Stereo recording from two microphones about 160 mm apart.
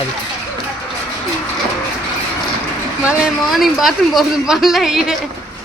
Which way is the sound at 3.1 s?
Centre (ahead or behind).